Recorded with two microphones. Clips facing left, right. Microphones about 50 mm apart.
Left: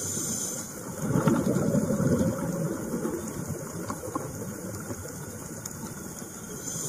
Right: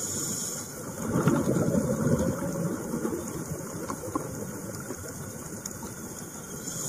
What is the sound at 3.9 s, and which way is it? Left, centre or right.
Vehicle, centre.